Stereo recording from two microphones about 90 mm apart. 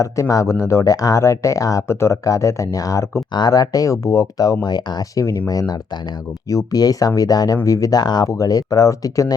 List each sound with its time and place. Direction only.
0.0 s speech: 40° left (ahead or behind)
3.3 s speech: 50° left (ahead or behind)
4.6 s speech: 50° left (ahead or behind)